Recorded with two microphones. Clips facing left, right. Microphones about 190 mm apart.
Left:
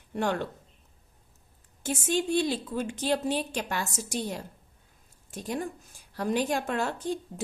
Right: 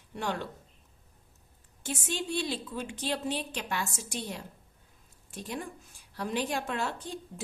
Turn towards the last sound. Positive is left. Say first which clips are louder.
# left 7 dB
turn(degrees=45)  # may be behind; listen again after turning